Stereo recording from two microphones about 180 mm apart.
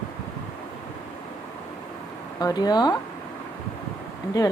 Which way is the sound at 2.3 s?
20° left (ahead or behind).